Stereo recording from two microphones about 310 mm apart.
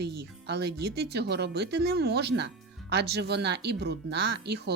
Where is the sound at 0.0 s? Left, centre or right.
Right.